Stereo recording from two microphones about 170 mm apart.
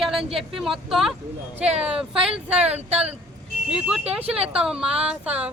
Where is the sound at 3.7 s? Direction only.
5° right (ahead or behind).